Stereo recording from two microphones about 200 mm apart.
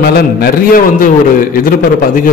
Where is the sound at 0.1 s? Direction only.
50° left (ahead or behind).